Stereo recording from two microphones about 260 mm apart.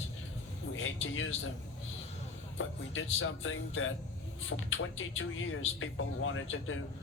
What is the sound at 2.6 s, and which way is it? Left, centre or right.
Speech, left.